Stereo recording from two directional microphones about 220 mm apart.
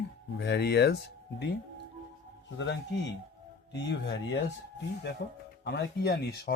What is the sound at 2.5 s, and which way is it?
Speech, 55° left (ahead or behind).